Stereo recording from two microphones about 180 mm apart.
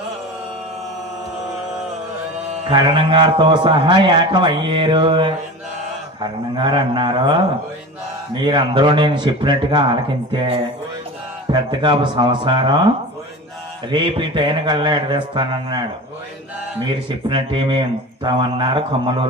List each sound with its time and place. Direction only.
2.6 s a man's voice: 25° right (ahead or behind)
13.9 s a man's voice: 25° right (ahead or behind)
17.1 s a man's voice: 25° right (ahead or behind)